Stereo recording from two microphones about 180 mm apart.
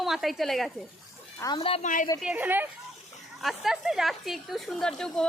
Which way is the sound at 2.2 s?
10° right (ahead or behind).